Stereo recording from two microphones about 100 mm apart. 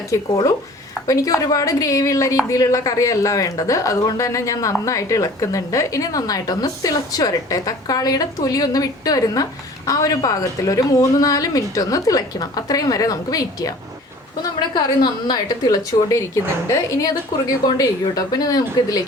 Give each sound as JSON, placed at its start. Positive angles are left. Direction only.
{"t": 0.1, "sound": "speech", "side_deg": 35}
{"t": 14.8, "sound": "speech", "side_deg": 45}